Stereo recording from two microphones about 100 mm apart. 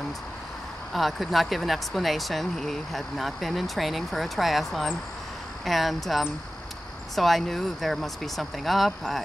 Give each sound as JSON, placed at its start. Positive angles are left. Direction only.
{"t": 0.9, "sound": "speech", "side_deg": 0}